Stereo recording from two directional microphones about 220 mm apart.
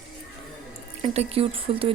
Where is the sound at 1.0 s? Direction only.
25° right (ahead or behind).